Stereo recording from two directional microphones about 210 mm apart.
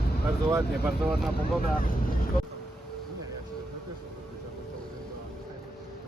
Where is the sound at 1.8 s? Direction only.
45° left (ahead or behind).